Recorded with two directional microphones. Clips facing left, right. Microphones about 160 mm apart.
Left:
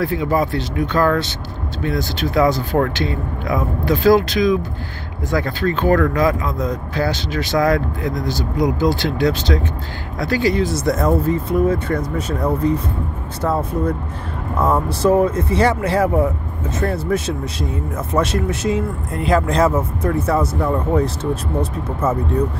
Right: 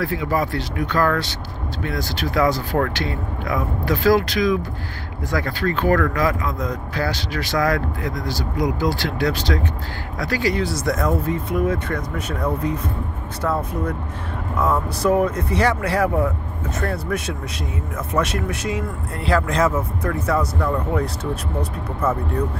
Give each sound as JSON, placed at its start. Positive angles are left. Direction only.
{"t": 0.0, "sound": "speech", "side_deg": 25}
{"t": 19.4, "sound": "speech", "side_deg": 30}